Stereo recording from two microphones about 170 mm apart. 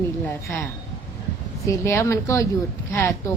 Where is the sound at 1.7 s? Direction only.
15° left (ahead or behind).